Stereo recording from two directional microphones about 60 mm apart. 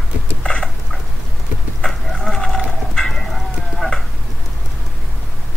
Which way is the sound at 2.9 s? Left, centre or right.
Centre.